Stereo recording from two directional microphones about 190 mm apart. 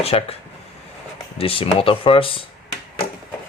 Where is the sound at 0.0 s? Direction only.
30° left (ahead or behind).